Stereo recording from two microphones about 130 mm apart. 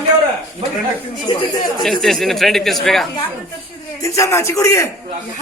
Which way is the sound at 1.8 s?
Centre (ahead or behind).